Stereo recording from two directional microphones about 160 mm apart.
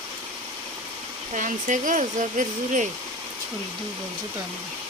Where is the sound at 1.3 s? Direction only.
50° right (ahead or behind).